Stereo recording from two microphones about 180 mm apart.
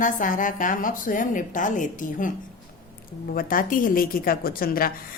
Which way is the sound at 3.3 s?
50° left (ahead or behind).